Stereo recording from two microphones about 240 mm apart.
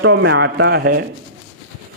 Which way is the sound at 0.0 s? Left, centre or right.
Right.